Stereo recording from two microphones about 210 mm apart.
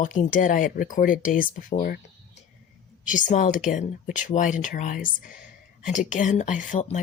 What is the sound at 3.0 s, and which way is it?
Speech, 35° left (ahead or behind).